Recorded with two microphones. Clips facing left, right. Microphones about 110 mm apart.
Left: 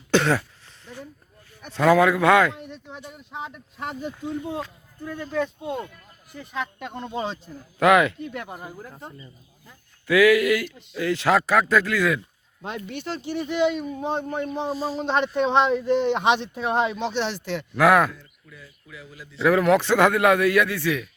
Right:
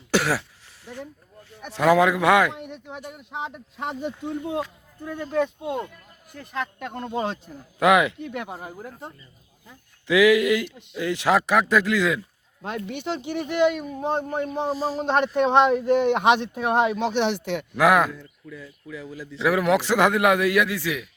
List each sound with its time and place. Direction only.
0.1 s speech: 5° right (ahead or behind)
1.6 s a man's voice: 15° right (ahead or behind)
6.3 s a man's voice: centre (ahead or behind); by 13.4 s 15° right (ahead or behind)
13.4 s speech: 55° right (ahead or behind)
13.8 s a man's voice: 5° right (ahead or behind)
15.1 s speech: 50° right (ahead or behind)
15.6 s a man's voice: 10° right (ahead or behind)
17.1 s speech: 60° right (ahead or behind)
17.5 s a man's voice: 15° right (ahead or behind)
19.4 s a man's voice: 15° right (ahead or behind)